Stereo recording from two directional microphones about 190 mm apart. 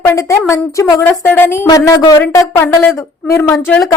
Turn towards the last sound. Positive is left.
turn(degrees=0)  # may be behind; listen again after turning